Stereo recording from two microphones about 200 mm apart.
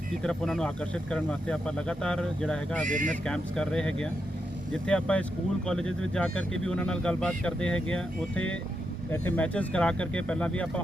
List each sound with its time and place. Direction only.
0.2 s speech: centre (ahead or behind)
2.8 s speech: 40° right (ahead or behind)
3.2 s speech: 5° left (ahead or behind)